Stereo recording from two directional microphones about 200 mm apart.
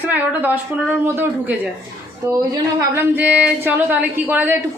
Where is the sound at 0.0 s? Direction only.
10° right (ahead or behind).